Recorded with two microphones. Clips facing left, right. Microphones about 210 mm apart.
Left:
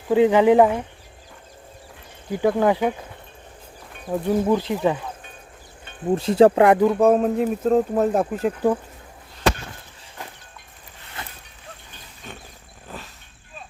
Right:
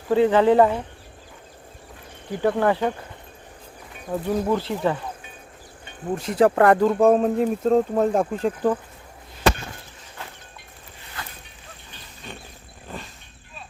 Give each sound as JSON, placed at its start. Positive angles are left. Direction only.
{"t": 0.1, "sound": "speech", "side_deg": 15}
{"t": 2.3, "sound": "speech", "side_deg": 10}
{"t": 4.1, "sound": "speech", "side_deg": 5}
{"t": 6.1, "sound": "speech", "side_deg": 30}
{"t": 6.6, "sound": "speech", "side_deg": 10}
{"t": 12.9, "sound": "vehicle", "side_deg": 0}